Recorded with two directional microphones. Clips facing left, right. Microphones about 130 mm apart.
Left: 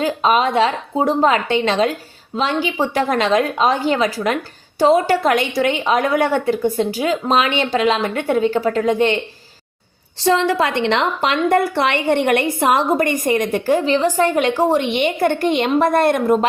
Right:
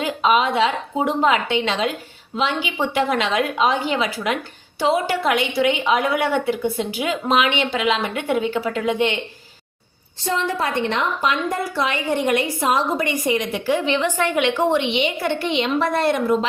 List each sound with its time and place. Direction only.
0.0 s a woman's voice: 40° left (ahead or behind)
10.2 s a woman's voice: 85° left; by 16.5 s 50° left (ahead or behind)